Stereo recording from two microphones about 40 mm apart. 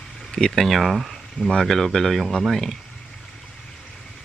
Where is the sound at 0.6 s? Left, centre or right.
Centre.